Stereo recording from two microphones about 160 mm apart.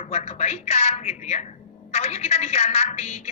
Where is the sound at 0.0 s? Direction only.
40° left (ahead or behind).